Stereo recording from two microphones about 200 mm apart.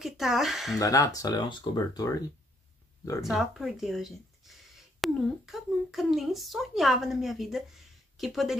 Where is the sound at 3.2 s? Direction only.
Centre (ahead or behind).